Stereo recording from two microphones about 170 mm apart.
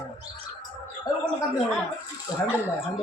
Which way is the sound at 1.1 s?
25° left (ahead or behind).